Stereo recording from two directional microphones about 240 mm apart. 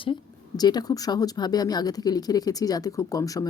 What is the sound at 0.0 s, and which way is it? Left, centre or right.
Speech, centre.